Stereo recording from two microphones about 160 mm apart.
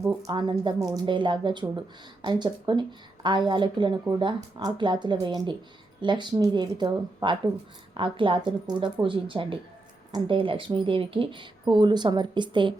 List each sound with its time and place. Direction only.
0.2 s speech: 30° right (ahead or behind)